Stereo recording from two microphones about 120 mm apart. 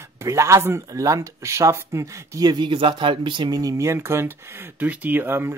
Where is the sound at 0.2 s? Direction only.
25° right (ahead or behind).